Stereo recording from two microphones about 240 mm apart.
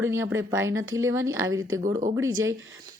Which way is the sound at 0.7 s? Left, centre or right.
Right.